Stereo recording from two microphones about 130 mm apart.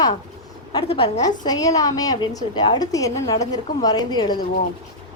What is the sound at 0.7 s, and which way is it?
Speech, 45° left (ahead or behind).